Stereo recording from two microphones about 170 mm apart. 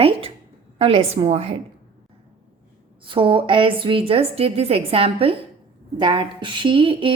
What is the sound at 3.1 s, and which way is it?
A woman's voice, 30° right (ahead or behind).